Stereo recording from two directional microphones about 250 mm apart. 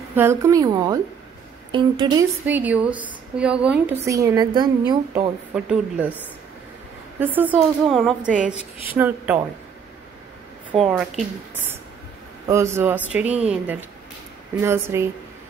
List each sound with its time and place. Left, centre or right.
0.1 s a woman's voice: centre
2.4 s a woman's voice: centre
5.5 s speech: centre
7.2 s a woman's voice: centre
10.7 s speech: centre
12.4 s a woman's voice: centre